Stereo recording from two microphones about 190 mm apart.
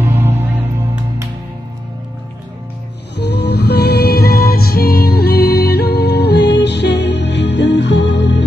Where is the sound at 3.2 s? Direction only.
60° left (ahead or behind).